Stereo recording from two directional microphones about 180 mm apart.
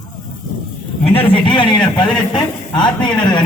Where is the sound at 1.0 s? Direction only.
30° left (ahead or behind).